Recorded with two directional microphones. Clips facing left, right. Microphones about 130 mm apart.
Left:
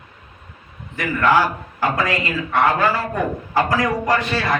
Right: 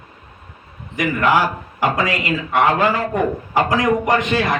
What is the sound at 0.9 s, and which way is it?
A man's voice, 15° right (ahead or behind).